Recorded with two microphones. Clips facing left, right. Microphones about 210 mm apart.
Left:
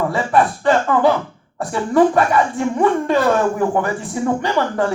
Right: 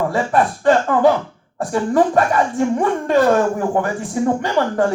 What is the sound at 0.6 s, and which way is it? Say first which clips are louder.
A woman's voice: right 5 dB; 45° right (ahead or behind).